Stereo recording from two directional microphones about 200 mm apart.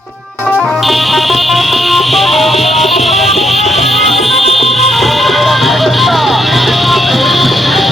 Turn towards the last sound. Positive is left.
turn(degrees=0)  # may be behind; listen again after turning